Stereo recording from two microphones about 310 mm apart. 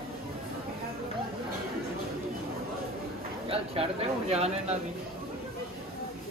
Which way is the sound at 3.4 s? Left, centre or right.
Centre.